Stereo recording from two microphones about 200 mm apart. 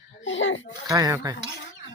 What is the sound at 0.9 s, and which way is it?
Speech, 15° right (ahead or behind).